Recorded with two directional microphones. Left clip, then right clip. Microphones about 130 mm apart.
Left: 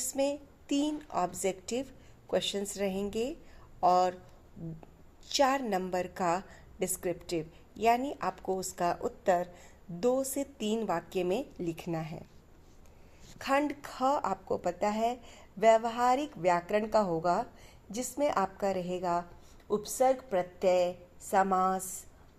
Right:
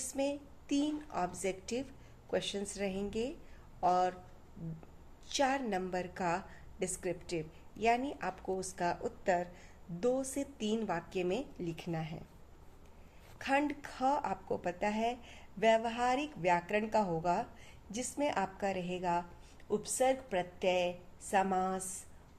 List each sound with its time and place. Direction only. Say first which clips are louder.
0.0 s a woman's voice: left 5 dB; 45° left (ahead or behind)
5.3 s a woman's voice: left 5 dB; 45° left (ahead or behind)
13.4 s a woman's voice: left 3 dB; 45° left (ahead or behind)